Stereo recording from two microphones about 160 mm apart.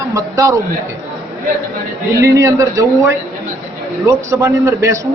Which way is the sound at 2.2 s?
20° right (ahead or behind).